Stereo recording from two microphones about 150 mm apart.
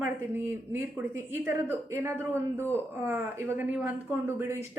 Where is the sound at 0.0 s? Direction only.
15° right (ahead or behind).